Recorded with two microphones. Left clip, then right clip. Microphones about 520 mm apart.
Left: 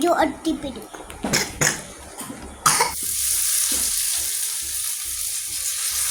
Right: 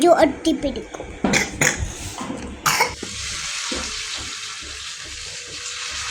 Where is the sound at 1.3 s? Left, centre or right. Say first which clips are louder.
Right 3 dB; left.